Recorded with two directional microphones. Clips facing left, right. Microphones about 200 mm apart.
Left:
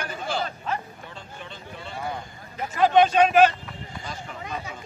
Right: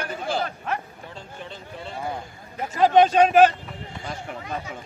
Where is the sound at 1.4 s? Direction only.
35° right (ahead or behind).